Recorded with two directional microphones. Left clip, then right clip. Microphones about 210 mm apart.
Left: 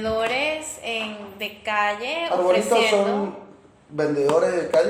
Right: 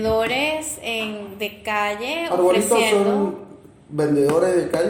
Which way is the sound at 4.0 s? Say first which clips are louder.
Right 2 dB; 5° right (ahead or behind).